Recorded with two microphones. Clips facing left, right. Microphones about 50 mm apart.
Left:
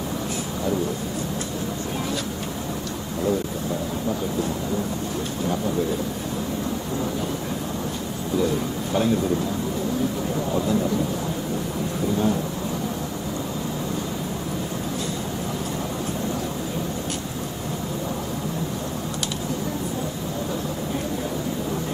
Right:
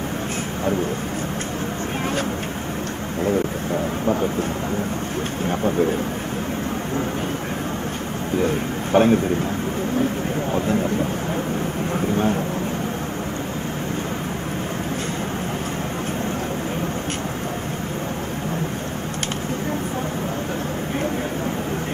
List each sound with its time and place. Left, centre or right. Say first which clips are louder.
4.1 s speech: right 4 dB; right
8.4 s a man's voice: right 1 dB; right
10.5 s speech: right 1 dB; right